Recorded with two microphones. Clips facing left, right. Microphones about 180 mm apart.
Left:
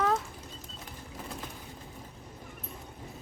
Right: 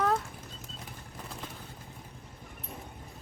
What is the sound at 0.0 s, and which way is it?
Bird, centre (ahead or behind).